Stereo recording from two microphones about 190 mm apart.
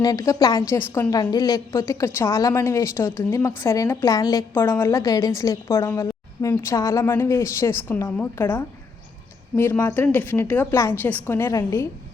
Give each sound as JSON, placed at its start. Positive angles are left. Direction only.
{"t": 0.0, "sound": "a woman's voice", "side_deg": 20}